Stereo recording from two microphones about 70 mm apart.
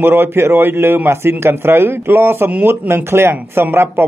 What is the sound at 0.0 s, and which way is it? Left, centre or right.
Speech, right.